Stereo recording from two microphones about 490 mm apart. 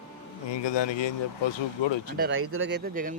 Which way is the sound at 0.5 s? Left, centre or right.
Left.